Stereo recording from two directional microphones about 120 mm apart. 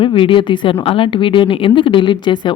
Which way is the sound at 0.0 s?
45° left (ahead or behind).